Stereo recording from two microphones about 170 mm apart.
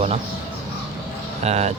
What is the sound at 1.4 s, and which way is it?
Speech, 40° right (ahead or behind).